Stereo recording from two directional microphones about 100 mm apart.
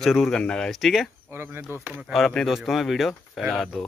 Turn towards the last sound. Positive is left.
turn(degrees=0)  # may be behind; listen again after turning